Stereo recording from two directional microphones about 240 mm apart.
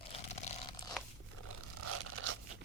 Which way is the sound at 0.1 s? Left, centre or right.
Left.